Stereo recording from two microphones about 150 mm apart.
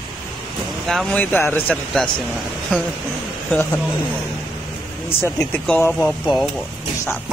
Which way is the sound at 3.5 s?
10° left (ahead or behind).